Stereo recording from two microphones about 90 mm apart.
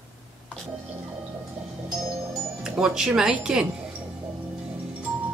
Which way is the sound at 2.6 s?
10° right (ahead or behind).